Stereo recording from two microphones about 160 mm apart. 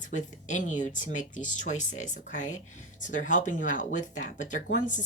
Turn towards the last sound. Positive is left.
turn(degrees=50)  # may be behind; listen again after turning